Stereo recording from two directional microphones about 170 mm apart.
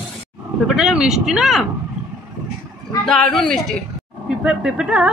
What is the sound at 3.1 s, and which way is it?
Speech, 5° left (ahead or behind).